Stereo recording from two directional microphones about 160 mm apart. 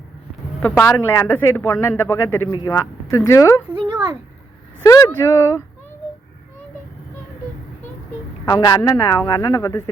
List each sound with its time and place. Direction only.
0.8 s speech: 15° left (ahead or behind)
4.8 s speech: 20° left (ahead or behind)
8.4 s speech: 20° left (ahead or behind)